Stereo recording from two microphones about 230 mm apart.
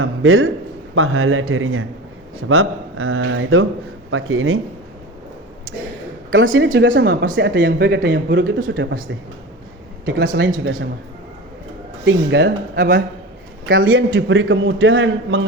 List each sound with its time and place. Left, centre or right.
0.0 s a man's voice: right
6.3 s a man's voice: right
10.2 s speech: right
12.0 s a man's voice: right